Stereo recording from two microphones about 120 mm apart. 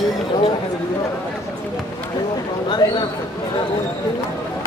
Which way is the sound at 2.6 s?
40° left (ahead or behind).